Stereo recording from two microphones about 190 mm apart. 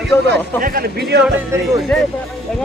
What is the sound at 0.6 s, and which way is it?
Speech, 50° right (ahead or behind).